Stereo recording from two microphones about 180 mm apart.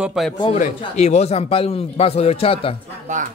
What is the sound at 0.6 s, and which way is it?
A man's voice, 40° left (ahead or behind).